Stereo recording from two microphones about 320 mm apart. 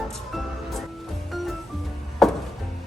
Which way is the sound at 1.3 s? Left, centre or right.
Centre.